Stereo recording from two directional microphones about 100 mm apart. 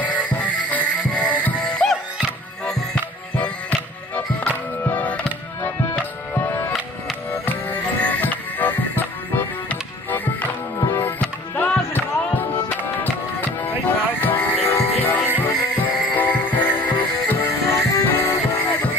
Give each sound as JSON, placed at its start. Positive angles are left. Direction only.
{"t": 0.0, "sound": "music", "side_deg": 15}